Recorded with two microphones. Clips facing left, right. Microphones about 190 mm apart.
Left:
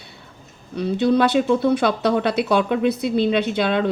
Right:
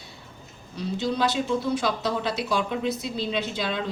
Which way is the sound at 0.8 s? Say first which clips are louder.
Left 8 dB; 60° left (ahead or behind).